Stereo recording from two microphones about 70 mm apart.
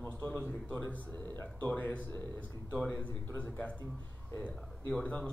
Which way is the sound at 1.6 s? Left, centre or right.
Left.